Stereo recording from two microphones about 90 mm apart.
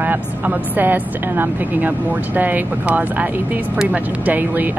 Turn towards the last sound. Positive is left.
turn(degrees=-20)  # may be behind; listen again after turning